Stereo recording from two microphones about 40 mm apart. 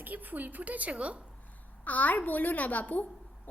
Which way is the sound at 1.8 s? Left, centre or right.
Left.